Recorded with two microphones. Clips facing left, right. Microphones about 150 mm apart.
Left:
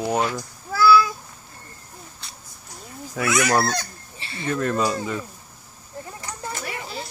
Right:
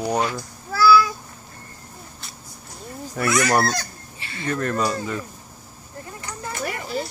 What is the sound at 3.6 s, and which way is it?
Goose, 20° left (ahead or behind).